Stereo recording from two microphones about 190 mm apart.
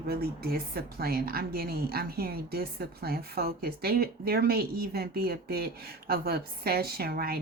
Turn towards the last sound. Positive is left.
turn(degrees=-55)  # may be behind; listen again after turning